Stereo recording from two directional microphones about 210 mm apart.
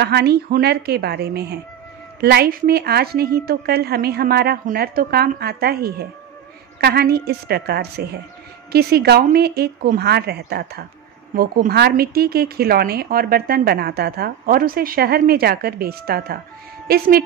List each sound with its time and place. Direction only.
0.0 s a woman's voice: 50° right (ahead or behind)